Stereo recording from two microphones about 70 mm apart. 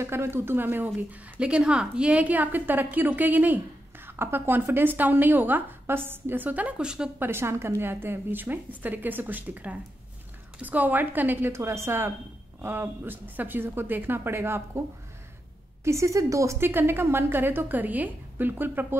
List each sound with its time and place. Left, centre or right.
0.0 s a woman's voice: right
1.4 s a woman's voice: centre
7.2 s a woman's voice: right
15.8 s a woman's voice: right